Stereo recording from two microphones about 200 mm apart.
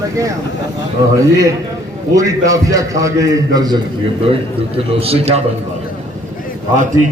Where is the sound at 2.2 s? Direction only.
15° right (ahead or behind).